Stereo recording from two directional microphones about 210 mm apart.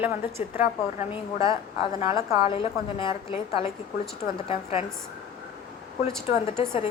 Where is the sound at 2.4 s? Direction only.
25° left (ahead or behind).